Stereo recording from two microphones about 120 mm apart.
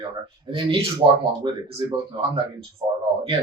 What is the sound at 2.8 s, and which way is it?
Speech, 35° right (ahead or behind).